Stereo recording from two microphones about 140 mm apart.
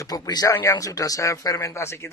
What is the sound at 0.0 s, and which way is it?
A man's voice, 25° left (ahead or behind).